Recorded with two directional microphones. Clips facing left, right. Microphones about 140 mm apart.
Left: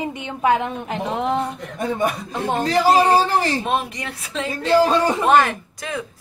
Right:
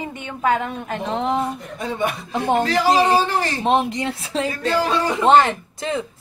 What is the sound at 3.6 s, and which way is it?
Speech, 25° right (ahead or behind).